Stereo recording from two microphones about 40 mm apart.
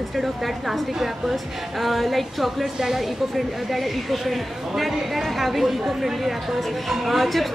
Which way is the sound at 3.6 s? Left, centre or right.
Centre.